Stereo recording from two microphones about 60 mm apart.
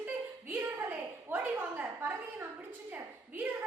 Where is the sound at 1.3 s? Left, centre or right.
Right.